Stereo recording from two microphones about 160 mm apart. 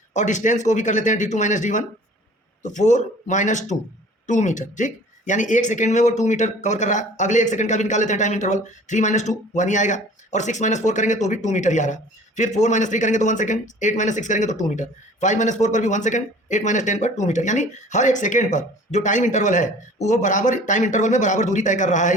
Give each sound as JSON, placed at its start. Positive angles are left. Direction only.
{"t": 0.1, "sound": "speech", "side_deg": 50}